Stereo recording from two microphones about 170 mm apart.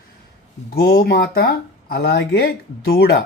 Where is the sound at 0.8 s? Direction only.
65° left (ahead or behind).